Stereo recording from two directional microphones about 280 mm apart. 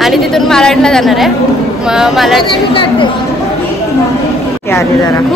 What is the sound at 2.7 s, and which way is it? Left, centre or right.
Speech, centre.